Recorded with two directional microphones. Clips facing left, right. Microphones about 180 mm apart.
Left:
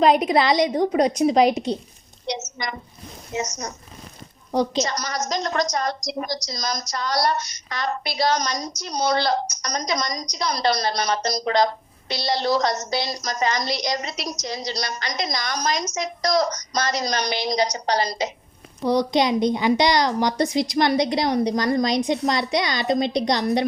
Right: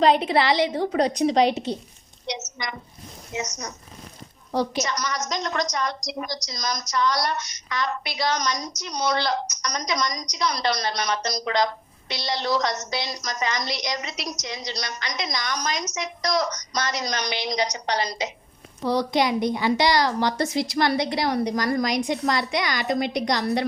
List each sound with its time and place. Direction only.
0.2 s a woman's voice: 15° left (ahead or behind)
2.2 s a woman's voice: 35° left (ahead or behind)
4.8 s a woman's voice: 35° left (ahead or behind)
18.9 s a woman's voice: 20° left (ahead or behind)